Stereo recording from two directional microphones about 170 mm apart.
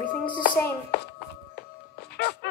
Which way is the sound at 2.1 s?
75° left (ahead or behind).